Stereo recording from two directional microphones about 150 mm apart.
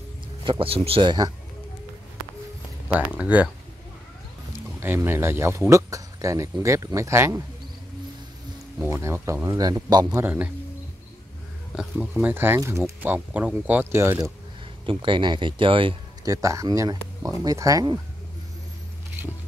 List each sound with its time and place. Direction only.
0.4 s speech: 35° right (ahead or behind)
2.9 s speech: 10° right (ahead or behind)
4.7 s speech: 15° right (ahead or behind)
8.7 s speech: 15° right (ahead or behind)
11.7 s speech: 5° right (ahead or behind)
14.9 s speech: 35° right (ahead or behind)
16.3 s speech: 20° right (ahead or behind)